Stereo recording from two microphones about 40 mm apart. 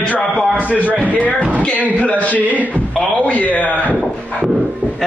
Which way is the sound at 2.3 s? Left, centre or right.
Right.